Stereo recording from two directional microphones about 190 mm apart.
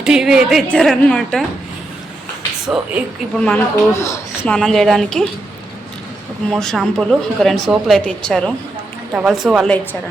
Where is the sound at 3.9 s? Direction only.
15° left (ahead or behind).